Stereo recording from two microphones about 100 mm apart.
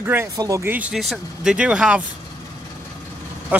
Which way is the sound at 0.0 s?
20° right (ahead or behind).